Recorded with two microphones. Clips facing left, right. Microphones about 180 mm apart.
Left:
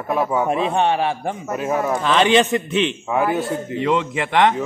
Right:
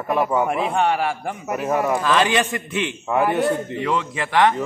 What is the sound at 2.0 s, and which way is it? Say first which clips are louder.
Speech: left 3 dB; 25° left (ahead or behind).